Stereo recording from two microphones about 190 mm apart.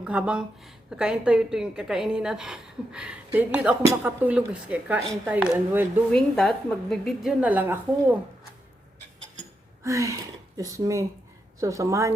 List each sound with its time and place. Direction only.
0.0 s a woman's voice: 5° right (ahead or behind)
6.1 s a woman's voice: 5° left (ahead or behind)
9.8 s speech: 15° right (ahead or behind)